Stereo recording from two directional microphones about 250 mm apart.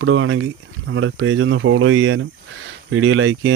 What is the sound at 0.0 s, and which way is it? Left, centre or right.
Speech, right.